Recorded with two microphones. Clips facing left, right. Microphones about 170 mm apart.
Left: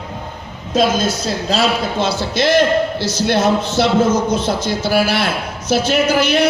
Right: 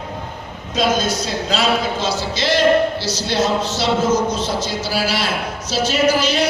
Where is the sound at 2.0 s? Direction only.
55° left (ahead or behind).